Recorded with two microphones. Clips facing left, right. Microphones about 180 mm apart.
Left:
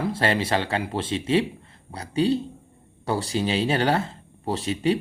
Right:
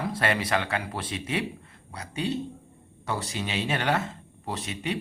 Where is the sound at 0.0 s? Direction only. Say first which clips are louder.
Left 4 dB; 30° left (ahead or behind).